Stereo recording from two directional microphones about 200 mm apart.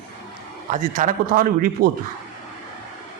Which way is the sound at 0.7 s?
40° right (ahead or behind).